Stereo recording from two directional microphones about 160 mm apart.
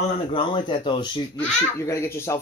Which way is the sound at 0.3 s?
30° left (ahead or behind).